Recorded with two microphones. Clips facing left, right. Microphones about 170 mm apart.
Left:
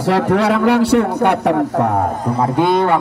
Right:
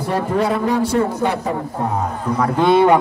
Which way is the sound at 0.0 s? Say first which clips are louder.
Left 4 dB; 90° left.